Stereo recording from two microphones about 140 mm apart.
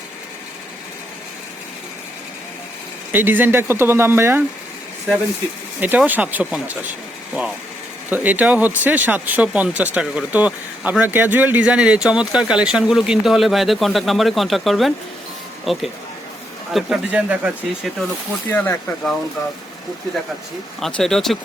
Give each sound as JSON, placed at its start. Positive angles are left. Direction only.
{"t": 3.1, "sound": "speech", "side_deg": -15}
{"t": 5.8, "sound": "speech", "side_deg": -10}
{"t": 8.1, "sound": "speech", "side_deg": -10}
{"t": 18.4, "sound": "speech", "side_deg": 15}
{"t": 20.8, "sound": "speech", "side_deg": 5}